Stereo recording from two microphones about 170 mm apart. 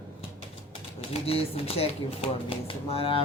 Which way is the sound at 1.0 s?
35° left (ahead or behind).